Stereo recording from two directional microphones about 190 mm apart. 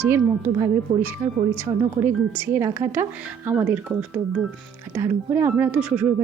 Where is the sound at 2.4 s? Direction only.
10° right (ahead or behind).